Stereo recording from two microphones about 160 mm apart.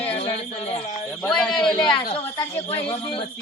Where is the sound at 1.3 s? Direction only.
5° left (ahead or behind).